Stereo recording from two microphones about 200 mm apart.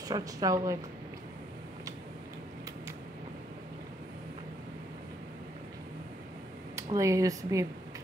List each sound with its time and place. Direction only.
0.1 s a woman's voice: 15° right (ahead or behind)
6.7 s speech: 15° right (ahead or behind)